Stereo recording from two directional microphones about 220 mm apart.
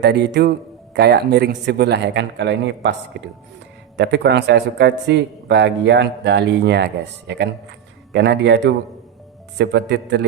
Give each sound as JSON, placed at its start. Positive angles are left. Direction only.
{"t": 0.0, "sound": "speech", "side_deg": -50}